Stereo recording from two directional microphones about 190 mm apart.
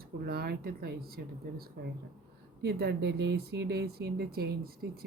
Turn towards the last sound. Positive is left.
turn(degrees=-55)  # may be behind; listen again after turning